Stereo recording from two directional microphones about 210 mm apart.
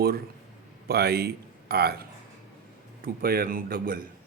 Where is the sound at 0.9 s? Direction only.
50° right (ahead or behind).